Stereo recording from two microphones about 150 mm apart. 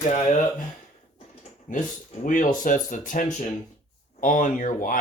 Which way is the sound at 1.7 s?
65° left (ahead or behind).